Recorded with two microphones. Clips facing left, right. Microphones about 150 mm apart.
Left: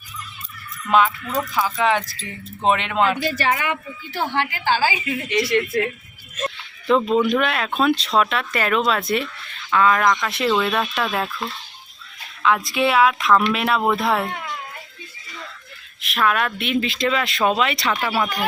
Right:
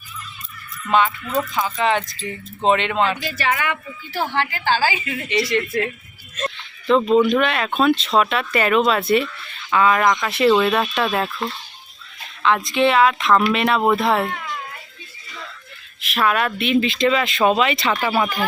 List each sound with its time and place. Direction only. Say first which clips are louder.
0.9 s speech: left 1 dB; 5° left (ahead or behind)
3.2 s speech: left 1 dB; 40° left (ahead or behind)
4.2 s a woman's voice: right 1 dB; 15° left (ahead or behind)
5.3 s speech: even; centre (ahead or behind)
16.0 s speech: right 1 dB; centre (ahead or behind)